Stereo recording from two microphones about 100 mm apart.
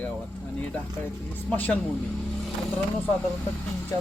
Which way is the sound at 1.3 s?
15° left (ahead or behind).